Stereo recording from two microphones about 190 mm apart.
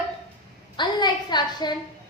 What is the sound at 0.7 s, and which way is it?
A woman's voice, 25° left (ahead or behind).